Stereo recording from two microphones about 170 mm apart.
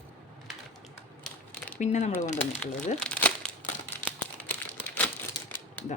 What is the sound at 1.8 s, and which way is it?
Speech, 40° left (ahead or behind).